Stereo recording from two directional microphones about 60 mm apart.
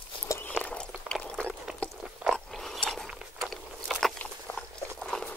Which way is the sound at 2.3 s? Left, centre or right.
Centre.